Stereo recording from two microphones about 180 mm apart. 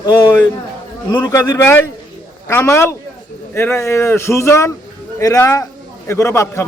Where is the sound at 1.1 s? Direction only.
20° left (ahead or behind).